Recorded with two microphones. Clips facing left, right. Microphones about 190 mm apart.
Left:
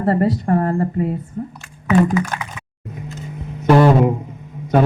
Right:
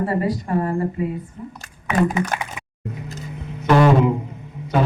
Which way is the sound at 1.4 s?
45° left (ahead or behind).